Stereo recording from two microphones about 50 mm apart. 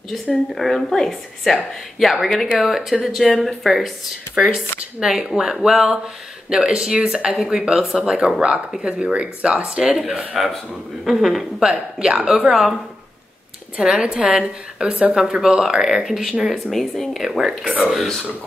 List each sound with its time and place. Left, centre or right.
0.6 s a woman's voice: centre
12.0 s speech: centre
13.7 s speech: centre
16.7 s a woman's voice: centre
17.6 s speech: right
17.9 s a woman's voice: centre